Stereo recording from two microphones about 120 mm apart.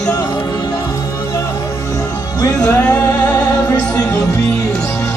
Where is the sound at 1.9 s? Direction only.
30° left (ahead or behind).